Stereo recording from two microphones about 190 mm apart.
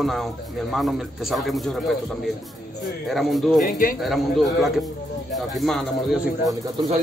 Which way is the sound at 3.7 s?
45° left (ahead or behind).